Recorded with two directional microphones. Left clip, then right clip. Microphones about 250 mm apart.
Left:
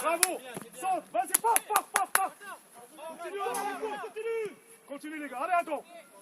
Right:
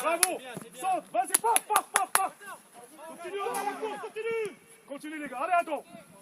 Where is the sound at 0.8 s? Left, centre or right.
Centre.